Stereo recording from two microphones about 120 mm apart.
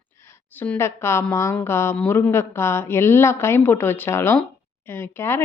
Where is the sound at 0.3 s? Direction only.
15° left (ahead or behind).